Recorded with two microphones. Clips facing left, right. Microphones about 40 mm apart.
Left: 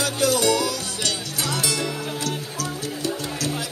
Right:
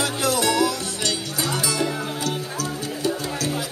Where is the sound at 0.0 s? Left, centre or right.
Right.